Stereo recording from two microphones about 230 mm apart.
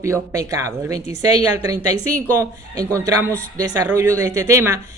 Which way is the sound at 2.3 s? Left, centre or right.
Centre.